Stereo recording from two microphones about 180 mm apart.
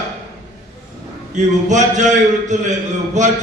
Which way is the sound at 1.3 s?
40° right (ahead or behind).